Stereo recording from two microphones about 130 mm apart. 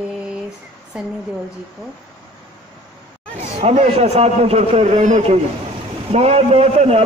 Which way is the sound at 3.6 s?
55° right (ahead or behind).